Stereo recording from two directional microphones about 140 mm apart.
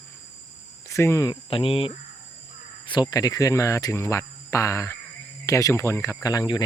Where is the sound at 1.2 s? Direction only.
35° left (ahead or behind).